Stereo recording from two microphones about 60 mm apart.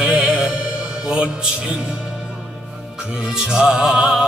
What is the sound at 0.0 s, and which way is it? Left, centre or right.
Music, centre.